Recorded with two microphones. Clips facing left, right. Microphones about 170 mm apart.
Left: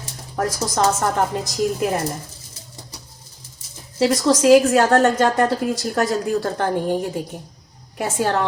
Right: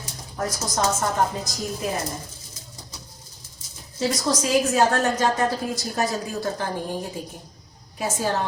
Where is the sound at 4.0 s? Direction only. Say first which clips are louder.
Left 7 dB; 70° left (ahead or behind).